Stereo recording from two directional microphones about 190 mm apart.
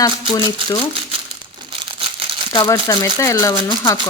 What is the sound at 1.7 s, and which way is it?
Crumpling, 25° right (ahead or behind).